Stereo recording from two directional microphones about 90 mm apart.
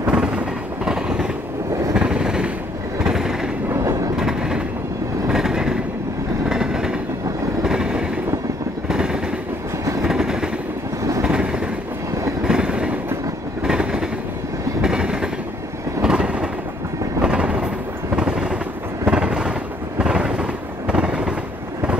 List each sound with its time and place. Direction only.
0.0 s vehicle: 10° right (ahead or behind)
2.0 s a sound: 10° right (ahead or behind)
3.0 s vehicle: 5° right (ahead or behind)
3.6 s train: 30° right (ahead or behind)
4.2 s train: 5° right (ahead or behind)
7.6 s vehicle: 10° right (ahead or behind)
8.8 s train: 10° right (ahead or behind)
11.2 s vehicle: 10° right (ahead or behind)
12.4 s train: 10° right (ahead or behind)
18.1 s vehicle: 10° right (ahead or behind)
19.0 s train: 10° right (ahead or behind)
20.0 s vehicle: 10° right (ahead or behind)